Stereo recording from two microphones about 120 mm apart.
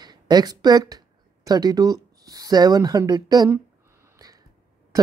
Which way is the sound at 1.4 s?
30° right (ahead or behind).